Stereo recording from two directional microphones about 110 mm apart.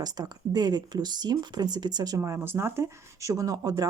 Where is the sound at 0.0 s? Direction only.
35° right (ahead or behind).